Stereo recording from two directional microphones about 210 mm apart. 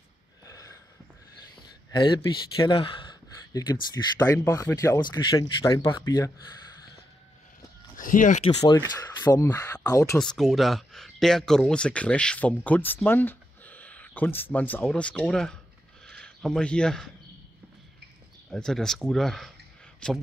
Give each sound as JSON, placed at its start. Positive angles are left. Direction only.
{"t": 0.5, "sound": "a sound", "side_deg": 15}
{"t": 1.9, "sound": "speech", "side_deg": 20}
{"t": 7.9, "sound": "speech", "side_deg": 40}
{"t": 10.1, "sound": "speech", "side_deg": 0}
{"t": 18.5, "sound": "speech", "side_deg": 5}